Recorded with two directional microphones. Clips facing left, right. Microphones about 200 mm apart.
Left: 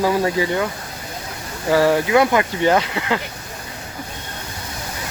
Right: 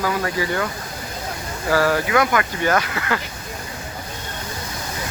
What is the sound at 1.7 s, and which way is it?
Speech, 25° left (ahead or behind).